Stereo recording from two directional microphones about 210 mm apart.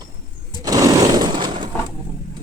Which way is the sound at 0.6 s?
15° right (ahead or behind).